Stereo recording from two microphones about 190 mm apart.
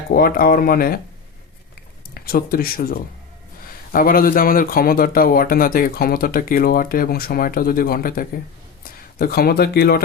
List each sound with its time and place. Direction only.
0.1 s speech: 50° left (ahead or behind)
2.2 s speech: 50° left (ahead or behind)